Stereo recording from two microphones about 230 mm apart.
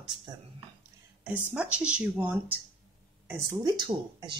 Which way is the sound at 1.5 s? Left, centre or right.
Centre.